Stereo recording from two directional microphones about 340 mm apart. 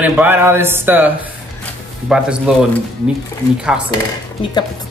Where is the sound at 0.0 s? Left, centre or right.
Centre.